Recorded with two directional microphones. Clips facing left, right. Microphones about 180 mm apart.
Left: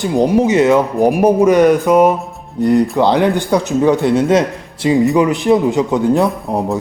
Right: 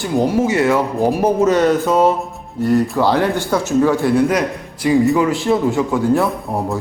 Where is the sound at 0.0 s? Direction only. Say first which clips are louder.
Left 3 dB; 20° left (ahead or behind).